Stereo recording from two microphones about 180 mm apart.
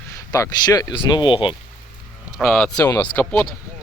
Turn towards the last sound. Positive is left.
turn(degrees=5)  # may be behind; listen again after turning